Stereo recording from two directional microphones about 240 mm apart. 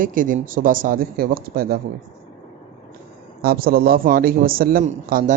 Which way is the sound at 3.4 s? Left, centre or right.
Right.